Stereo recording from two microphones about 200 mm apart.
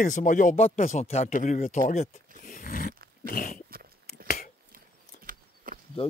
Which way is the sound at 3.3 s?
45° left (ahead or behind).